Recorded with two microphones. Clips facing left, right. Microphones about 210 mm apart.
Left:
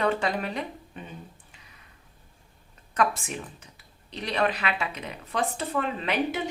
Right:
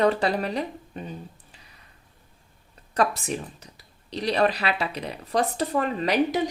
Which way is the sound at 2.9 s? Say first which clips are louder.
Right 2 dB; 35° right (ahead or behind).